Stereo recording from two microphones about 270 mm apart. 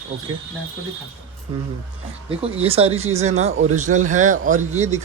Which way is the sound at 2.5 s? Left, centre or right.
Right.